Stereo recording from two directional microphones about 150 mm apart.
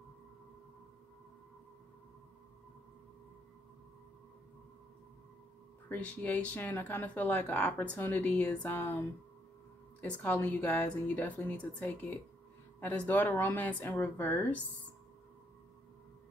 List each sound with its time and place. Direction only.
5.9 s speech: 10° left (ahead or behind)